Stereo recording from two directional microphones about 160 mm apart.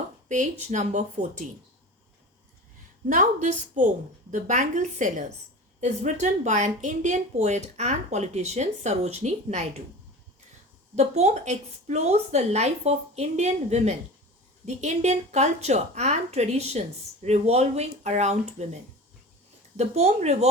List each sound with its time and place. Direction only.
0.3 s speech: 50° right (ahead or behind)
3.1 s speech: 50° right (ahead or behind)
10.9 s speech: 45° right (ahead or behind)